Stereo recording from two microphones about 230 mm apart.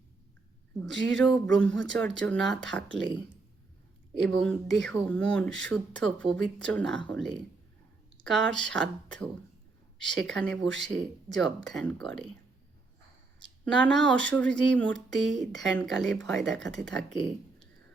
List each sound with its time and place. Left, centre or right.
0.9 s speech: centre
10.6 s speech: right
10.9 s speech: centre
13.7 s speech: centre